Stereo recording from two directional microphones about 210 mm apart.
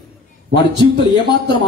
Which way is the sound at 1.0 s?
20° left (ahead or behind).